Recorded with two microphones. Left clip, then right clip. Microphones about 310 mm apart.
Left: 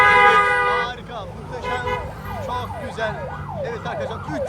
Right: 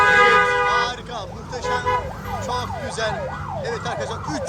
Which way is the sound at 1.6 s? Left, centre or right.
Centre.